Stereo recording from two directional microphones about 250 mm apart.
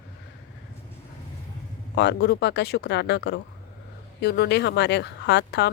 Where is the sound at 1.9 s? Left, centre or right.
Left.